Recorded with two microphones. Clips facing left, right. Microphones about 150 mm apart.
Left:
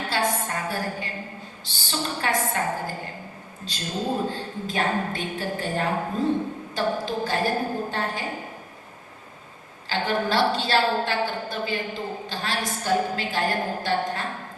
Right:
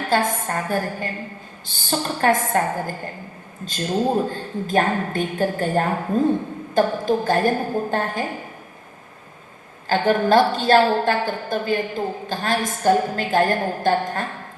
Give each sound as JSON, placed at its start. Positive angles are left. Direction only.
{"t": 0.1, "sound": "a sound", "side_deg": -50}
{"t": 1.6, "sound": "a woman's voice", "side_deg": -50}
{"t": 4.3, "sound": "a woman's voice", "side_deg": -50}
{"t": 9.9, "sound": "a woman's voice", "side_deg": -50}